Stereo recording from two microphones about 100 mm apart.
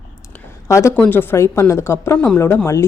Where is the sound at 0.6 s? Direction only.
30° left (ahead or behind).